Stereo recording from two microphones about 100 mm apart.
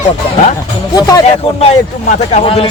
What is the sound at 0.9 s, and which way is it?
Speech, 35° left (ahead or behind).